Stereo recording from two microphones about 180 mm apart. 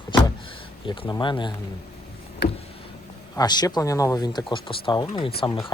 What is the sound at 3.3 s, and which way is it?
Speech, 20° left (ahead or behind).